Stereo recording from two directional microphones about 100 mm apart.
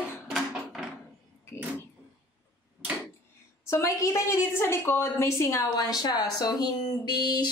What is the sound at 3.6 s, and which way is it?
A woman's voice, 30° left (ahead or behind).